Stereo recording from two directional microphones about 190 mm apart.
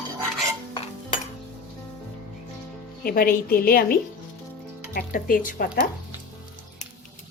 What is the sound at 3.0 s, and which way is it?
Speech, 50° left (ahead or behind).